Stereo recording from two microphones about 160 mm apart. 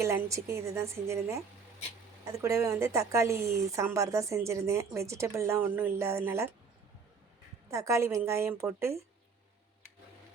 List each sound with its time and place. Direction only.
0.0 s a woman's voice: 20° right (ahead or behind)
7.7 s a woman's voice: 20° right (ahead or behind)